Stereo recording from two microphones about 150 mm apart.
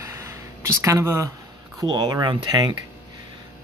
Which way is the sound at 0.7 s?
20° right (ahead or behind).